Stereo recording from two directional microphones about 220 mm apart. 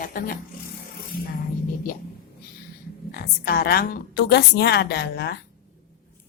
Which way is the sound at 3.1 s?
45° left (ahead or behind).